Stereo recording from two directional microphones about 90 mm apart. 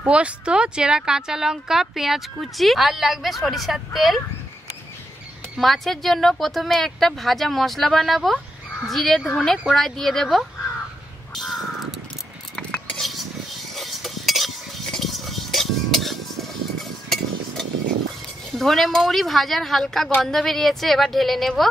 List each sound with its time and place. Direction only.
0.0 s speech: 10° right (ahead or behind)
5.6 s speech: centre (ahead or behind)
11.3 s crow: centre (ahead or behind)
12.5 s cutlery: 10° left (ahead or behind)
18.5 s speech: centre (ahead or behind)